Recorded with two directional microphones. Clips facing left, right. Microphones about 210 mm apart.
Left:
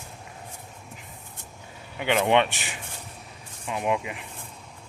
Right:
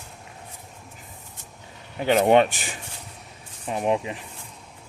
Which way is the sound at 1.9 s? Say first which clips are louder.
Right 4 dB; 35° right (ahead or behind).